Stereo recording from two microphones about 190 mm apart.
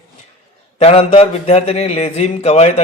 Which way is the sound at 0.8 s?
35° left (ahead or behind).